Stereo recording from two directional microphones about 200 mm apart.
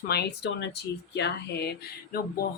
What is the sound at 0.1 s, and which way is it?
Speech, 55° left (ahead or behind).